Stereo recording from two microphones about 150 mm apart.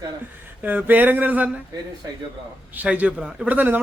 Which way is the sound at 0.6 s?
10° right (ahead or behind).